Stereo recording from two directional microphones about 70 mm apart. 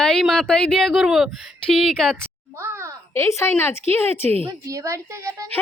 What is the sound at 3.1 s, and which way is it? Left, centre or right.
Speech, left.